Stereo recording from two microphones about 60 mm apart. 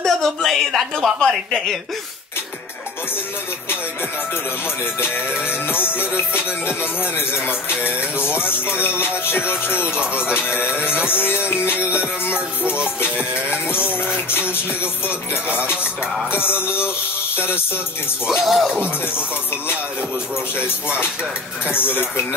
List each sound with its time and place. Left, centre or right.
0.0 s speech: centre
5.5 s music: left
7.2 s music: centre
8.4 s music: left
8.7 s music: right
11.1 s music: left
11.7 s music: centre
14.8 s music: right
16.3 s music: left
16.5 s music: centre
18.2 s music: centre
21.7 s music: left